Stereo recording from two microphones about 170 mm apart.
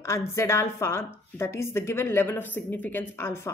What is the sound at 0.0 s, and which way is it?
A woman's voice, 15° left (ahead or behind).